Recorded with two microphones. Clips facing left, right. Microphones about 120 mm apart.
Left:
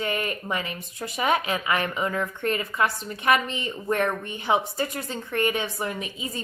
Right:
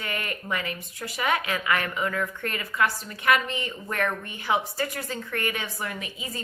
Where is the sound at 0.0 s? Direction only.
25° left (ahead or behind).